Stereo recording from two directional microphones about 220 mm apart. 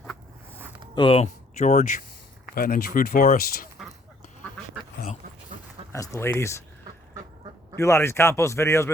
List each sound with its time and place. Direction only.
0.9 s speech: 25° left (ahead or behind); by 3.7 s 40° left (ahead or behind)
5.9 s speech: 15° left (ahead or behind)
7.8 s speech: 15° left (ahead or behind)